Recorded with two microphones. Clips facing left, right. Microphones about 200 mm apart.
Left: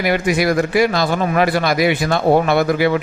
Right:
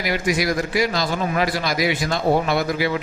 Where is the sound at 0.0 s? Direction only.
55° left (ahead or behind).